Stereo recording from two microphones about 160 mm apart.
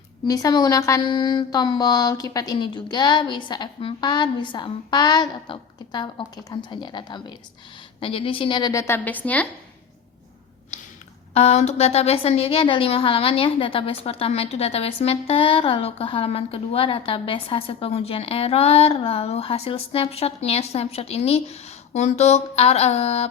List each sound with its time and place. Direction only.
0.3 s mantra: 20° left (ahead or behind)
11.3 s a woman's voice: 45° left (ahead or behind)